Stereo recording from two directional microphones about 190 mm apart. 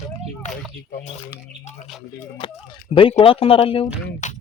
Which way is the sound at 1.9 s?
Centre (ahead or behind).